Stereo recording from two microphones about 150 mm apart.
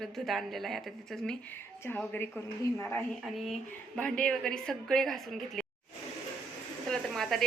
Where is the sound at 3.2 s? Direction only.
Centre (ahead or behind).